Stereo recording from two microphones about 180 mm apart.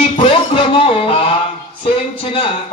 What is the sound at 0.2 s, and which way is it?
Music, 30° left (ahead or behind).